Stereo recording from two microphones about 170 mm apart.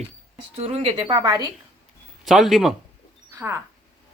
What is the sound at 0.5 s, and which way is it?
Speech, 35° right (ahead or behind).